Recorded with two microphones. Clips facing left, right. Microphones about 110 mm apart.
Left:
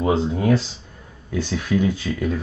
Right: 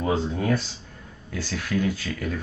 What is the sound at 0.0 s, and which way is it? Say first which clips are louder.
Speech: left 5 dB; 20° left (ahead or behind).